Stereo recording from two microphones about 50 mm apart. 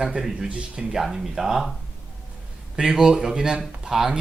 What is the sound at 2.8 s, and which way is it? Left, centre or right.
Speech, centre.